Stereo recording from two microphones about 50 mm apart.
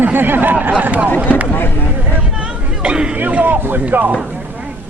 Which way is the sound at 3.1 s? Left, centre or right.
Right.